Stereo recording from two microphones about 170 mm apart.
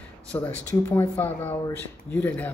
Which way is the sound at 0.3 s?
10° left (ahead or behind).